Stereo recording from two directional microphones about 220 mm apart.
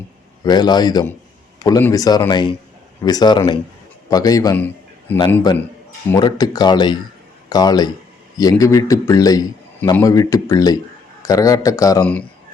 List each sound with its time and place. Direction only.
0.4 s a man's voice: 20° left (ahead or behind)